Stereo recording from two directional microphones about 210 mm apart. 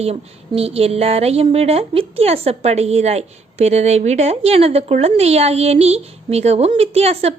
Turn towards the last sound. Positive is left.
turn(degrees=-30)  # may be behind; listen again after turning